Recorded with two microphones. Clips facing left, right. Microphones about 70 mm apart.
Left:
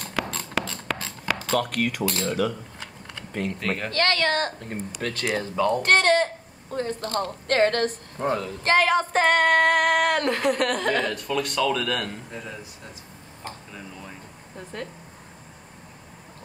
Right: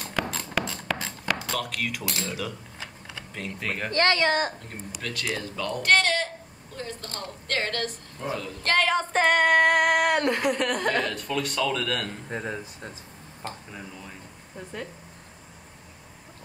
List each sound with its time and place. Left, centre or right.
0.0 s a sound: centre
1.6 s speech: left
3.5 s female singing: centre
3.9 s speech: right
4.6 s speech: left
8.6 s female singing: centre
12.3 s speech: right